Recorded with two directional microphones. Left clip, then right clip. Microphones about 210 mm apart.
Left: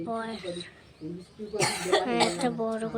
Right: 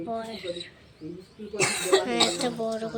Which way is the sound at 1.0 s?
35° left (ahead or behind).